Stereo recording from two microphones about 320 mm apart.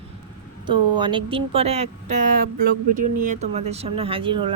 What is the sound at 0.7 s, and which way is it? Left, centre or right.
Speech, centre.